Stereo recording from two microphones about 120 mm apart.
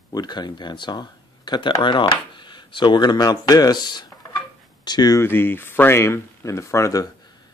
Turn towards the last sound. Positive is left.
turn(degrees=25)  # may be behind; listen again after turning